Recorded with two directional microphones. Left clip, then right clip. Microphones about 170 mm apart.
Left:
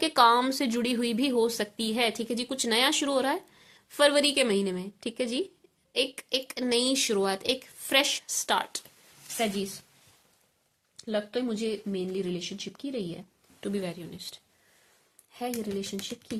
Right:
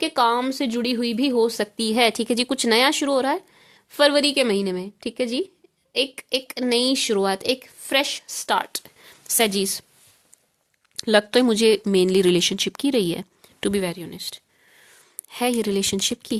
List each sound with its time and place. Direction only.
0.0 s speech: 20° right (ahead or behind)
10.9 s speech: 90° right; by 14.4 s 45° right (ahead or behind)
15.3 s speech: 75° right (ahead or behind)